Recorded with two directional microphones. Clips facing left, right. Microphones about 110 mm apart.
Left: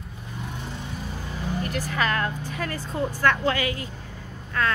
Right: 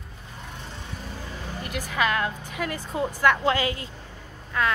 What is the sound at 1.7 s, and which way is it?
A woman's voice, 10° right (ahead or behind).